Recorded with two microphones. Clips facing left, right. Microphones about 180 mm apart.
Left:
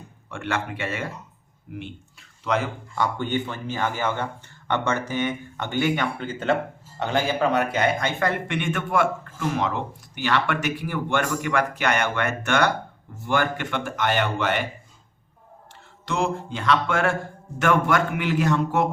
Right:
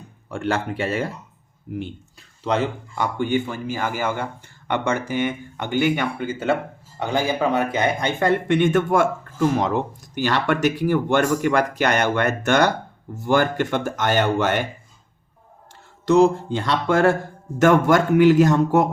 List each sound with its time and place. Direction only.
0.3 s speech: 35° right (ahead or behind)
3.0 s speech: 10° right (ahead or behind); by 14.6 s 45° right (ahead or behind)
16.0 s speech: 40° right (ahead or behind)